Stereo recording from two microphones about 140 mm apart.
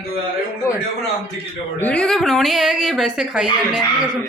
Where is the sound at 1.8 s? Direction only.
10° left (ahead or behind).